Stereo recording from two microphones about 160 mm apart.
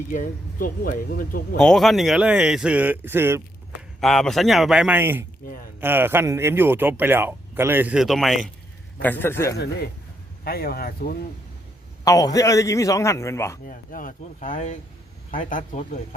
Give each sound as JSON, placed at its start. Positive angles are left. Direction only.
{"t": 0.1, "sound": "speech", "side_deg": 55}
{"t": 1.5, "sound": "speech", "side_deg": 5}
{"t": 4.0, "sound": "speech", "side_deg": 0}
{"t": 9.0, "sound": "a man's voice", "side_deg": 10}
{"t": 10.4, "sound": "speech", "side_deg": 70}
{"t": 12.0, "sound": "a man's voice", "side_deg": 20}
{"t": 13.7, "sound": "speech", "side_deg": 60}